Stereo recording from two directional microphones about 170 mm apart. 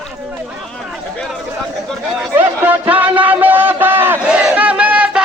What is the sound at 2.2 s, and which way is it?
Music, 10° right (ahead or behind).